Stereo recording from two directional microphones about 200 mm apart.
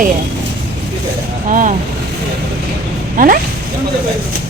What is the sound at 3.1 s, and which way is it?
Speech, 45° right (ahead or behind).